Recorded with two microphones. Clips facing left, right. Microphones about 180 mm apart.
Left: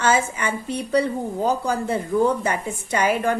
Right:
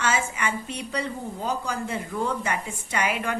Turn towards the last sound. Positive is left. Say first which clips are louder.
# left 6 dB
turn(degrees=35)  # may be behind; listen again after turning